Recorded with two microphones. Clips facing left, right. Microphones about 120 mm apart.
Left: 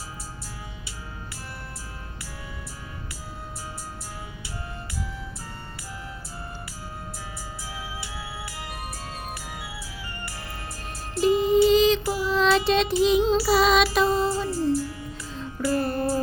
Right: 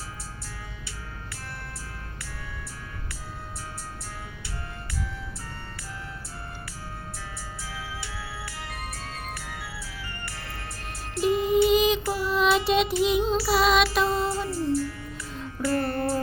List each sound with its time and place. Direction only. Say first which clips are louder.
9.5 s music: left 1 dB; 5° left (ahead or behind)
11.2 s music: left 3 dB; centre (ahead or behind)
14.5 s music: left 2 dB; 65° right (ahead or behind)
15.3 s music: left 1 dB; centre (ahead or behind)